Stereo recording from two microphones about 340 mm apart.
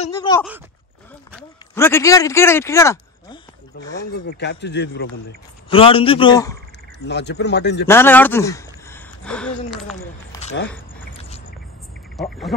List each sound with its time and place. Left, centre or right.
0.0 s a man's voice: centre
4.1 s speech: left
5.7 s a man's voice: centre
7.1 s speech: left
7.8 s speech: centre
10.3 s a sound: centre
12.2 s speech: centre